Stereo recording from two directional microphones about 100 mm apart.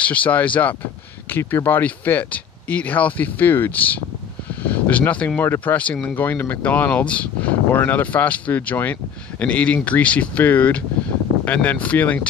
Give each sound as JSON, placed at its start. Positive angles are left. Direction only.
{"t": 0.0, "sound": "speech", "side_deg": 15}